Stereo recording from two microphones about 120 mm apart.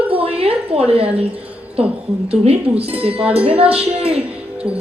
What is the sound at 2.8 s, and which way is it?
A woman's voice, 55° right (ahead or behind).